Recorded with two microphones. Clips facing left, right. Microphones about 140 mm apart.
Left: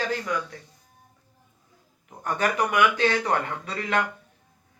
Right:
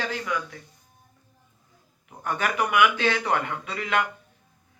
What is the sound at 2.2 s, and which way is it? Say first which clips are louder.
Speech: left 1 dB; 40° left (ahead or behind).